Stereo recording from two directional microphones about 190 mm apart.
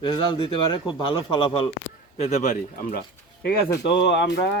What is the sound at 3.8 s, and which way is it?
Speech, 65° left (ahead or behind).